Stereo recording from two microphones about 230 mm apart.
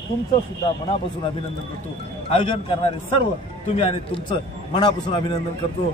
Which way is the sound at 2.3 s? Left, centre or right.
Left.